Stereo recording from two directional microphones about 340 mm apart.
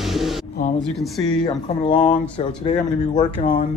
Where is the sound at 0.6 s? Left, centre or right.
Left.